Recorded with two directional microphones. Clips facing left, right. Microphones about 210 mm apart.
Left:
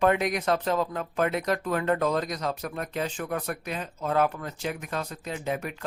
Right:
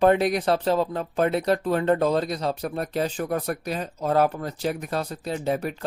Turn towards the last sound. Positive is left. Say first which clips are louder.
# right 5 dB
turn(degrees=-35)  # may be behind; listen again after turning